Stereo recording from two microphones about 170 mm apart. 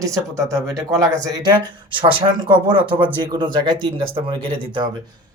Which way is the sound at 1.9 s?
30° right (ahead or behind).